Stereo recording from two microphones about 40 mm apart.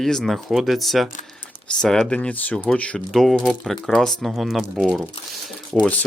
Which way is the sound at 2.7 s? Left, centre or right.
Left.